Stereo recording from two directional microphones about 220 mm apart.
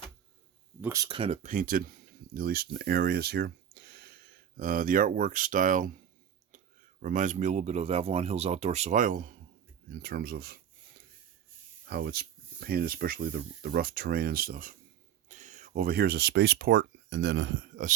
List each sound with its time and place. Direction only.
0.8 s speech: 15° right (ahead or behind); by 5.9 s 35° right (ahead or behind)
6.5 s a sound: 35° right (ahead or behind)
7.0 s speech: 35° right (ahead or behind)
11.9 s speech: 45° right (ahead or behind)